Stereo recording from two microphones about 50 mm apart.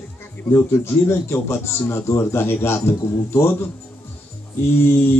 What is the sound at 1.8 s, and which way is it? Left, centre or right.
Speech, left.